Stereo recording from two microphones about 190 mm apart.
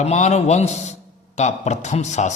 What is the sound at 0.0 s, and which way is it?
Speech, 35° left (ahead or behind).